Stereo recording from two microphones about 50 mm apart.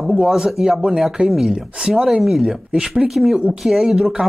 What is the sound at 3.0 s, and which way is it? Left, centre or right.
Speech, centre.